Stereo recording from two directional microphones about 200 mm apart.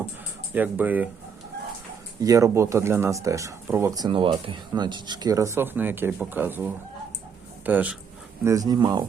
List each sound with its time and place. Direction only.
0.5 s speech: 10° right (ahead or behind)
2.2 s speech: 15° right (ahead or behind)
8.4 s speech: 20° right (ahead or behind)